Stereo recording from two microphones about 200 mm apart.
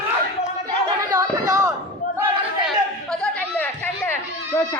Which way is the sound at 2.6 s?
5° left (ahead or behind).